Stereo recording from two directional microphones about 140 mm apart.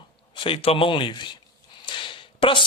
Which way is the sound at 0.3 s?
40° left (ahead or behind).